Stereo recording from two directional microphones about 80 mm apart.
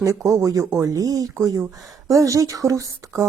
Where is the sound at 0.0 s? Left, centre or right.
Right.